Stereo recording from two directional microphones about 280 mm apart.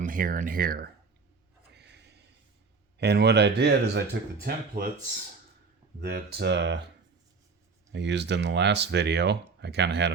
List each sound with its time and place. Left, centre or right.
0.0 s speech: right
1.7 s a sound: right
3.0 s speech: right
6.0 s speech: right
7.9 s speech: right